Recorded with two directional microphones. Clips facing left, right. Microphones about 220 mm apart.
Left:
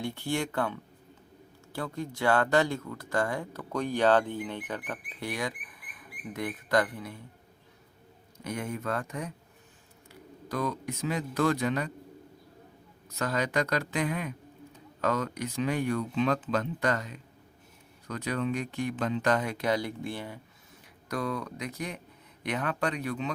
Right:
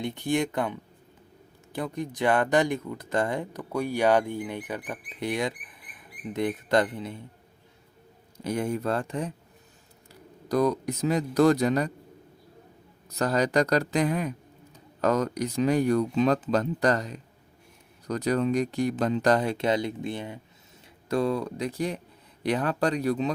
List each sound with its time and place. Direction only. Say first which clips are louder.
0.0 s speech: right 5 dB; 20° right (ahead or behind)
8.4 s speech: right 6 dB; 30° right (ahead or behind)
13.1 s speech: right 5 dB; 35° right (ahead or behind)